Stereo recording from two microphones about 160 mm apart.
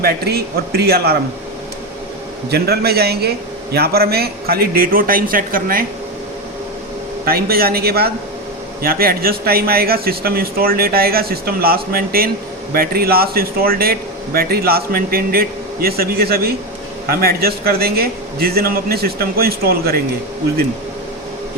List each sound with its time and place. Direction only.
0.0 s a man's voice: 75° right (ahead or behind)
2.5 s a man's voice: 80° right; by 5.8 s 60° right (ahead or behind)
7.3 s a man's voice: 70° right (ahead or behind)